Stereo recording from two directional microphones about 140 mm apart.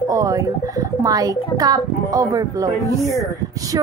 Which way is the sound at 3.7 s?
25° right (ahead or behind).